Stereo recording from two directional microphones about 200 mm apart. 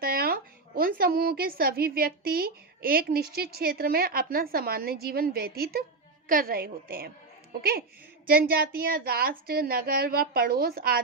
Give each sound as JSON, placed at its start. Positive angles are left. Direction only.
{"t": 0.0, "sound": "a woman's voice", "side_deg": -50}